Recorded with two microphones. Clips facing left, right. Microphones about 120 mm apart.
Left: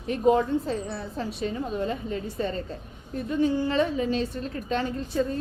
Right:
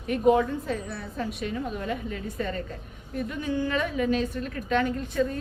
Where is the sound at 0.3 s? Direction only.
30° left (ahead or behind).